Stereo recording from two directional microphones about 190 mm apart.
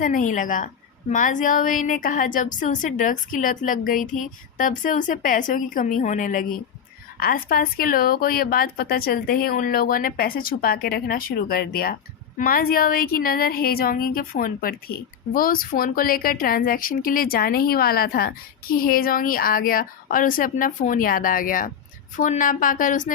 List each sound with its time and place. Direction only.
0.0 s a woman's voice: 40° left (ahead or behind)